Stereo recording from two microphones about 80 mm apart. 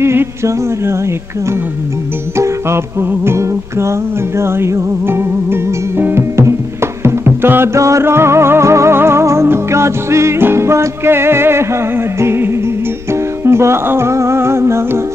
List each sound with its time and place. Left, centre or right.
0.0 s music: right
2.3 s music: right